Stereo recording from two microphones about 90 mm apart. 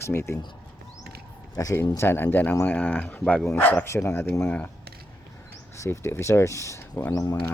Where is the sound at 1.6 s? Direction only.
40° left (ahead or behind).